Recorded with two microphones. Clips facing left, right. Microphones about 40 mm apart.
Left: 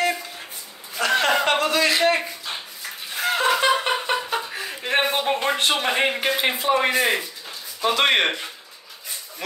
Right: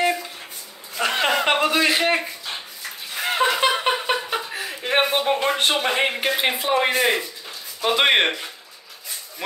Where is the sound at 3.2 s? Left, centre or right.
Centre.